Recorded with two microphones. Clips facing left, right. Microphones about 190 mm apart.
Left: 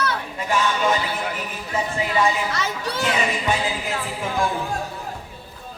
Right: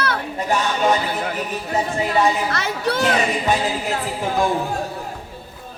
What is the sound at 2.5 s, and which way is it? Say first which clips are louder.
Speech: right 4 dB; 60° right (ahead or behind).